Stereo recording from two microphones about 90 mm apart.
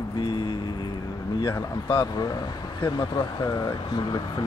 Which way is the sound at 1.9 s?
50° left (ahead or behind).